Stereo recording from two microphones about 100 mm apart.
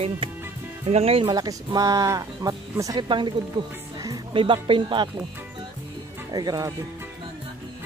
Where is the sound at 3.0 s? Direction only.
50° right (ahead or behind).